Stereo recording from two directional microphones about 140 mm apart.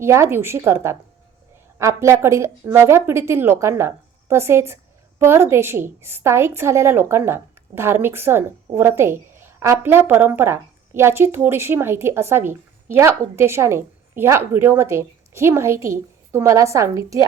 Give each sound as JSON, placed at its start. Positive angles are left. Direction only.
{"t": 0.0, "sound": "a woman's voice", "side_deg": -20}